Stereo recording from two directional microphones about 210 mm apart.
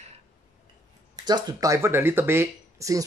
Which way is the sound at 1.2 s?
20° right (ahead or behind).